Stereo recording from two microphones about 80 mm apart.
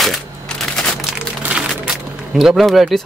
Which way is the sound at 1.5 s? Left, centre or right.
Centre.